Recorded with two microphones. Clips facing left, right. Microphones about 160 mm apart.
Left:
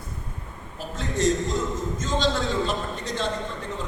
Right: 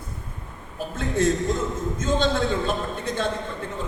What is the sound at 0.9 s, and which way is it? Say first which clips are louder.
A man's voice: right 1 dB; 55° right (ahead or behind).